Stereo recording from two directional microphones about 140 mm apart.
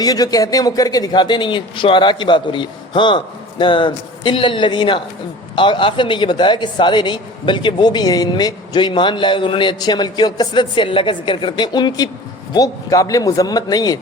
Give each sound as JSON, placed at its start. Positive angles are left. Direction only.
{"t": 0.0, "sound": "a man's voice", "side_deg": 25}